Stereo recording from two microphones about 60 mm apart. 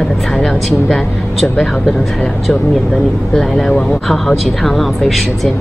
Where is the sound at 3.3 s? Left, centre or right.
Centre.